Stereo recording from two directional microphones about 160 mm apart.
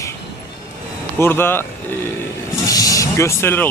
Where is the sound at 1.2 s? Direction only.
15° left (ahead or behind).